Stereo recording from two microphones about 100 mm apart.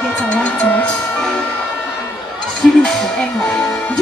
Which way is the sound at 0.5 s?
10° left (ahead or behind).